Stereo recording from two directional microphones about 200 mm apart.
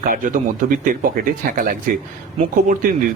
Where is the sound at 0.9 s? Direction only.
40° right (ahead or behind).